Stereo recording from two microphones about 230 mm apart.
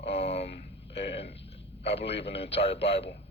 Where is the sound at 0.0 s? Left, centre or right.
Left.